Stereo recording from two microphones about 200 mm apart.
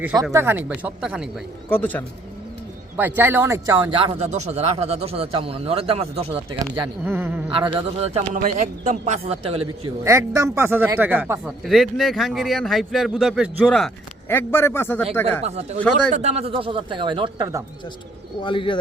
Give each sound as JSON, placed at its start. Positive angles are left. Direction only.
{"t": 0.3, "sound": "speech", "side_deg": -10}
{"t": 1.7, "sound": "a man's voice", "side_deg": 10}
{"t": 2.9, "sound": "speech", "side_deg": -10}
{"t": 6.8, "sound": "speech", "side_deg": -10}
{"t": 7.5, "sound": "a man's voice", "side_deg": -25}
{"t": 10.0, "sound": "a man's voice", "side_deg": -15}
{"t": 15.4, "sound": "a man's voice", "side_deg": -35}
{"t": 18.4, "sound": "speech", "side_deg": 25}